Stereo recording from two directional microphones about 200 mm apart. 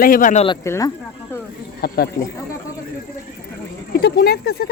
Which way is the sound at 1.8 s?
50° left (ahead or behind).